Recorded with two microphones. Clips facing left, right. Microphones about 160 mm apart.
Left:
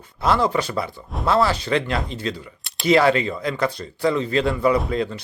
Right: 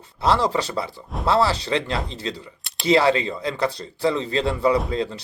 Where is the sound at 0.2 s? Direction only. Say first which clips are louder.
Left 1 dB; 30° right (ahead or behind).